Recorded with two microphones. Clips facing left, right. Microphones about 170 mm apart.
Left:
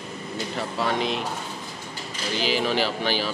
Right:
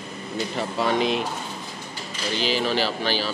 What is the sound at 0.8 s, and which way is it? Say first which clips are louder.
Speech: right 3 dB; centre (ahead or behind).